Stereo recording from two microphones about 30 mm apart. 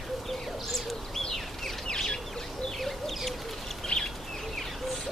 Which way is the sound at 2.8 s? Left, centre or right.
Centre.